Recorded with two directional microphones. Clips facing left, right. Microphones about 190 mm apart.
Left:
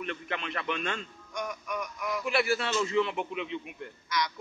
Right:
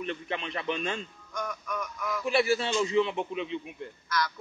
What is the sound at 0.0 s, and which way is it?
A man's voice, 25° right (ahead or behind).